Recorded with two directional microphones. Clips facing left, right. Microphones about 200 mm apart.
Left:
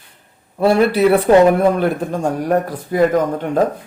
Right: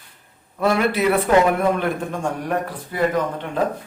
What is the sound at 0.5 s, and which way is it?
A man's voice, 30° left (ahead or behind).